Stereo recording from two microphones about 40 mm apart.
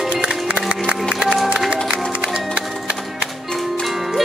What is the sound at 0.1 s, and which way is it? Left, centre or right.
Music, right.